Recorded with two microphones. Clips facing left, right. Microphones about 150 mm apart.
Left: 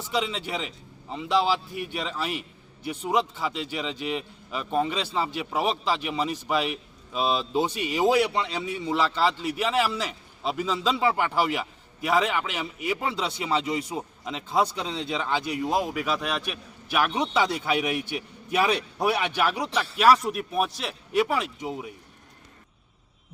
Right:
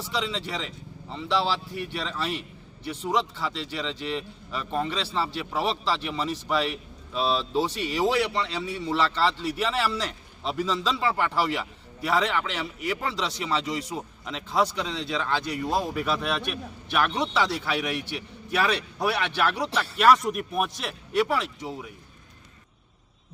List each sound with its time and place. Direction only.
0.2 s a man's voice: 10° left (ahead or behind)
15.9 s a man's voice: 5° left (ahead or behind)